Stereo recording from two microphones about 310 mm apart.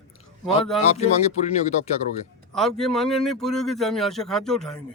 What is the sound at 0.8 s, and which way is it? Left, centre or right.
Speech, left.